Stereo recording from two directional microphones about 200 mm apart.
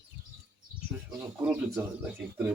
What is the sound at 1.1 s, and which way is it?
Speech, 10° right (ahead or behind).